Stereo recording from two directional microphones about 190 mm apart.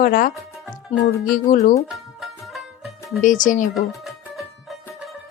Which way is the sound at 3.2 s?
45° left (ahead or behind).